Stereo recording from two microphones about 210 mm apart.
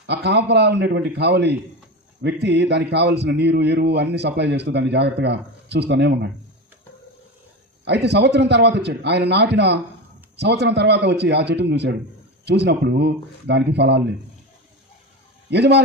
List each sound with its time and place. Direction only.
0.1 s a man's voice: 55° right (ahead or behind)
7.9 s a man's voice: 55° right (ahead or behind)
15.4 s a man's voice: 55° right (ahead or behind)